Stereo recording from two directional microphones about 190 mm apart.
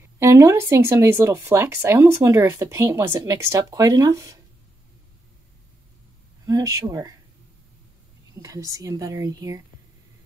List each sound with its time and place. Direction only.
0.2 s speech: 15° right (ahead or behind)
6.4 s speech: 20° right (ahead or behind)
8.4 s speech: 15° right (ahead or behind)